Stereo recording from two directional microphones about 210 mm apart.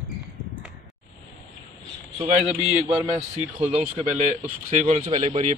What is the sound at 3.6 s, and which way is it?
Speech, 30° right (ahead or behind).